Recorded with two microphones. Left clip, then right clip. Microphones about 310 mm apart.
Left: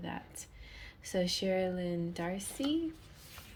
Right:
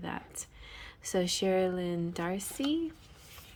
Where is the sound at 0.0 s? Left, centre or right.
Centre.